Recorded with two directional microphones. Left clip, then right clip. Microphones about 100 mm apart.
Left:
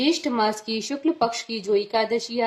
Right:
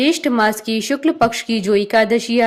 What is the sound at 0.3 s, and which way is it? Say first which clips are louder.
Speech: right 7 dB; 75° right (ahead or behind).